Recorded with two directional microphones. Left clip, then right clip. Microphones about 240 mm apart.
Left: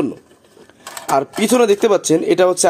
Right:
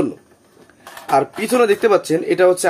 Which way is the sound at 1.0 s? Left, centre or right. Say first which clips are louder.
Left 1 dB; left.